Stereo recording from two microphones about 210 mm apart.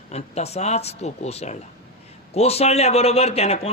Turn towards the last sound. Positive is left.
turn(degrees=30)  # may be behind; listen again after turning